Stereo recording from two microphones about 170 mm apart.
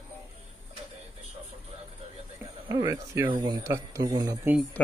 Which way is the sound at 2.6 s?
25° right (ahead or behind).